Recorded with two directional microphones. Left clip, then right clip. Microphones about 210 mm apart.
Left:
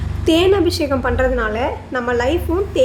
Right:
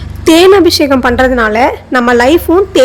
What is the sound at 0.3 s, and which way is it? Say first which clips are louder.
A woman's voice: right 10 dB; 35° right (ahead or behind).